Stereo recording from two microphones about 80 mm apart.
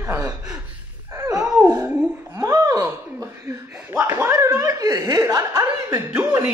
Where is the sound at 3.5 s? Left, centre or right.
Right.